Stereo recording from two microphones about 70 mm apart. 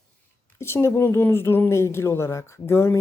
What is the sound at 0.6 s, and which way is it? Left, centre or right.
Speech, left.